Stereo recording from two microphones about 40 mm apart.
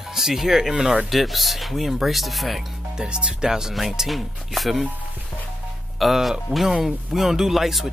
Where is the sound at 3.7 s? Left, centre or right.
Centre.